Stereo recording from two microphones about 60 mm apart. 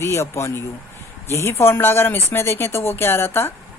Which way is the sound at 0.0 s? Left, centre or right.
Left.